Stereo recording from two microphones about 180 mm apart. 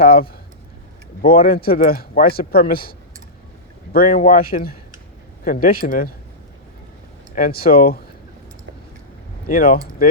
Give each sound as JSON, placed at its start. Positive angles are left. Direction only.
{"t": 0.0, "sound": "speech", "side_deg": 55}
{"t": 3.9, "sound": "a man's voice", "side_deg": 55}
{"t": 7.3, "sound": "speech", "side_deg": 55}
{"t": 9.5, "sound": "a man's voice", "side_deg": 50}